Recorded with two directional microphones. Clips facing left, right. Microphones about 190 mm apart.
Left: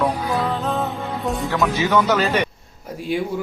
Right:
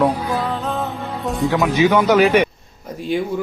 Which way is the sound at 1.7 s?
15° right (ahead or behind).